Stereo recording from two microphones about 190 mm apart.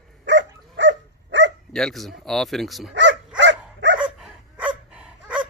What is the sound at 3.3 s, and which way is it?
Dog, 70° right (ahead or behind).